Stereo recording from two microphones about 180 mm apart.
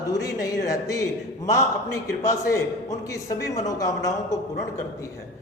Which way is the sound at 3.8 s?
20° left (ahead or behind).